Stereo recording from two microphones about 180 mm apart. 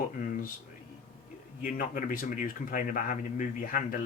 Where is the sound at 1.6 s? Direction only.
45° left (ahead or behind).